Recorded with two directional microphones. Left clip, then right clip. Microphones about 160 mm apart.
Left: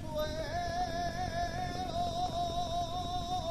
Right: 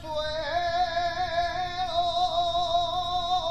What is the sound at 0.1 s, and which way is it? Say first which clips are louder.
Music: right 8 dB; 50° left (ahead or behind).